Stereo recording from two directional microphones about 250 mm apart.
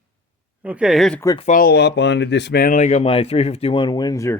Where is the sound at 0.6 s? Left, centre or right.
Centre.